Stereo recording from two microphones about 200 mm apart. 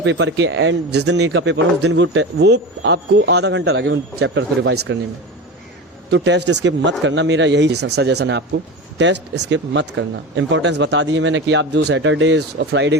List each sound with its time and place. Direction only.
0.0 s speech: 65° right (ahead or behind)
6.1 s speech: 60° right (ahead or behind)